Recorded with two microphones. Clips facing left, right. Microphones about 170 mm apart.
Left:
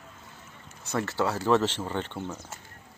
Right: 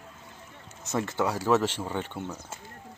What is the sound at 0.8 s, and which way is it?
Speech, 20° right (ahead or behind).